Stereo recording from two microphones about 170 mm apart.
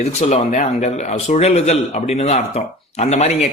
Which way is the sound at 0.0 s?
40° left (ahead or behind).